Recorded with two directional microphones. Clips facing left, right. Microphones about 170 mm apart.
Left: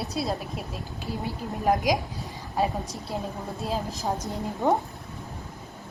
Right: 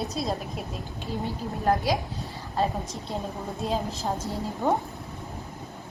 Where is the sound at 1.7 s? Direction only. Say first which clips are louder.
Left 1 dB; 15° left (ahead or behind).